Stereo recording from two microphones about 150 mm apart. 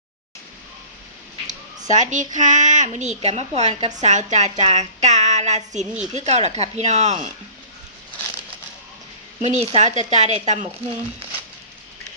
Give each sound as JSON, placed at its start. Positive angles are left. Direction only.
{"t": 1.5, "sound": "a child's voice", "side_deg": -55}
{"t": 9.4, "sound": "a woman's voice", "side_deg": -50}